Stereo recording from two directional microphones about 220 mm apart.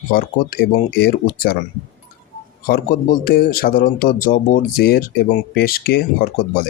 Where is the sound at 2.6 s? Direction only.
45° left (ahead or behind).